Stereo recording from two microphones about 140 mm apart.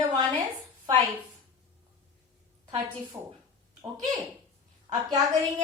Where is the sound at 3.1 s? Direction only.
15° right (ahead or behind).